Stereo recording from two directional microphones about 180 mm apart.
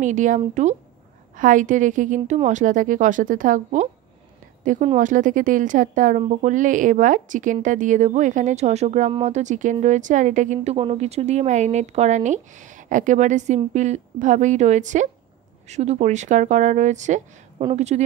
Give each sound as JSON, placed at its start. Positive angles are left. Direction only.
{"t": 0.0, "sound": "a woman's voice", "side_deg": -45}